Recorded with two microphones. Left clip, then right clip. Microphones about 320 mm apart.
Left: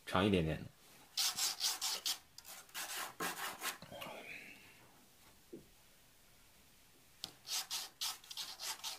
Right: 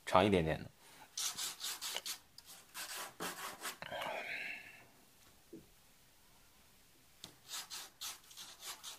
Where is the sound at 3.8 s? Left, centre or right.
Right.